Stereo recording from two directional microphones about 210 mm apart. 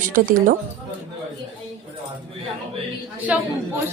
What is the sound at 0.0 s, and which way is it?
Speech, 40° right (ahead or behind).